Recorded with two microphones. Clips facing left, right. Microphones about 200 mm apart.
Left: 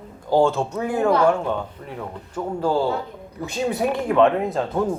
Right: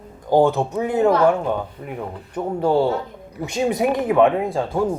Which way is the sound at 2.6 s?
25° right (ahead or behind).